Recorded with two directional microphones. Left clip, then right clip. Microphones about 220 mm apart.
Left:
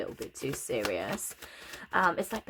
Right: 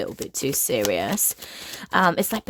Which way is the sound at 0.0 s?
45° right (ahead or behind).